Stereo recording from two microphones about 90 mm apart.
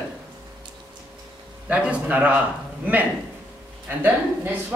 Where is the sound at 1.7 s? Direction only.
15° right (ahead or behind).